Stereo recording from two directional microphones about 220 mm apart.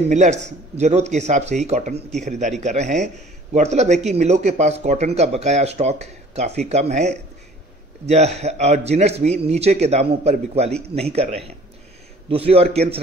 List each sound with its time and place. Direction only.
0.1 s a man's voice: 30° right (ahead or behind)